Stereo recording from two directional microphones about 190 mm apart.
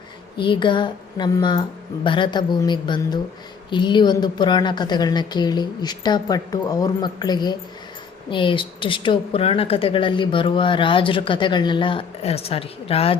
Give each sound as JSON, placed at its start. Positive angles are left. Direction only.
{"t": 0.3, "sound": "a woman's voice", "side_deg": 25}